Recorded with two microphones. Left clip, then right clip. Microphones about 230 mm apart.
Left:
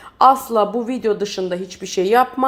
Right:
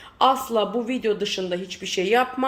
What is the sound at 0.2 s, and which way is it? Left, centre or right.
Speech, left.